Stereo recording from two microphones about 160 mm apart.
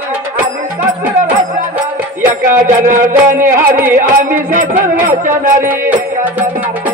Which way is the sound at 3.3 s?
15° right (ahead or behind).